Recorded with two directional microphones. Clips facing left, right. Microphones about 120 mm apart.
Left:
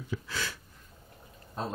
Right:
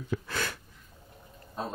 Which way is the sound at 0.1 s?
55° right (ahead or behind).